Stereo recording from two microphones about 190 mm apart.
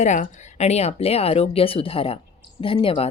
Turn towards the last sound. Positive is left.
turn(degrees=30)  # may be behind; listen again after turning